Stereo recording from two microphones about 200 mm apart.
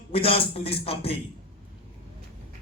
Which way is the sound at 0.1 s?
30° left (ahead or behind).